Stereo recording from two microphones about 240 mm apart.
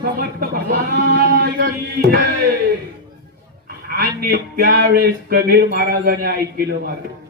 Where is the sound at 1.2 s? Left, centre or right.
Right.